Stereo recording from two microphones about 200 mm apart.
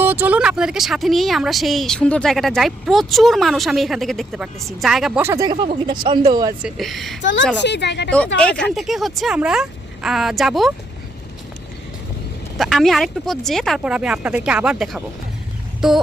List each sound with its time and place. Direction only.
0.0 s speech: 10° right (ahead or behind)
5.5 s speech: 25° right (ahead or behind)
6.6 s speech: centre (ahead or behind)
7.6 s speech: 60° left (ahead or behind)
8.4 s speech: 5° left (ahead or behind)
12.5 s speech: centre (ahead or behind)